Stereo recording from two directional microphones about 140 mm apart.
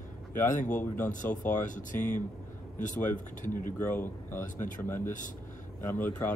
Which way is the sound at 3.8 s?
15° left (ahead or behind).